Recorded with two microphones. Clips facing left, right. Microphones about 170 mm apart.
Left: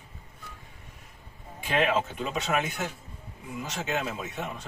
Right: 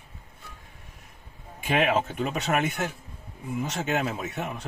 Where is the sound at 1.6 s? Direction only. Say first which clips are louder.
Right 2 dB; 55° right (ahead or behind).